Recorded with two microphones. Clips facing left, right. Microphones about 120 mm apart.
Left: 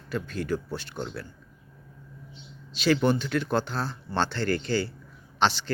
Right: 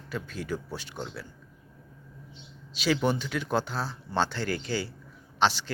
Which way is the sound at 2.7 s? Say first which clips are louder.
Left 3 dB; 10° right (ahead or behind).